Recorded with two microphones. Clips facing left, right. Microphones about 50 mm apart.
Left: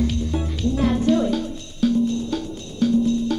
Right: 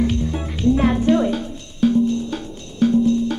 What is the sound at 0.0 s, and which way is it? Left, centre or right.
Music, right.